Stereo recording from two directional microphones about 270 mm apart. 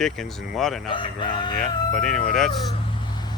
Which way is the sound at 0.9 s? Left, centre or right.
Centre.